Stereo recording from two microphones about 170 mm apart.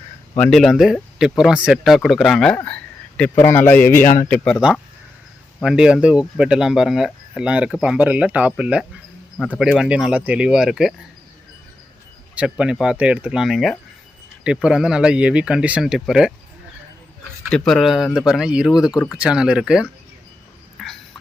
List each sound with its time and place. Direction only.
0.3 s speech: 5° left (ahead or behind)
4.0 s speech: 45° left (ahead or behind)
4.3 s speech: 10° left (ahead or behind)
5.6 s speech: 5° right (ahead or behind)
12.3 s speech: 5° right (ahead or behind)
17.5 s speech: centre (ahead or behind)
20.8 s fowl: centre (ahead or behind)